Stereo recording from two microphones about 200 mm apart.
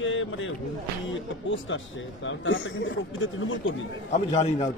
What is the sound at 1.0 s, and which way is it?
Speech, 70° left (ahead or behind).